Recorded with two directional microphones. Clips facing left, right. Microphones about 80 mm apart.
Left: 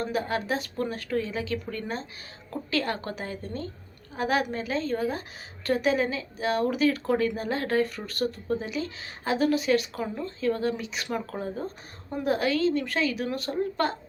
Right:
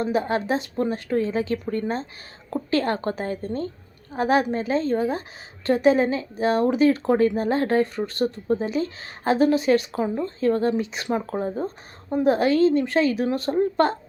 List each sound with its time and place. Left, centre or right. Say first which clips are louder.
0.0 s speech: right 5 dB; right